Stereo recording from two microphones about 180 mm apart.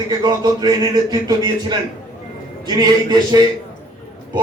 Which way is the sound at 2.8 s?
25° right (ahead or behind).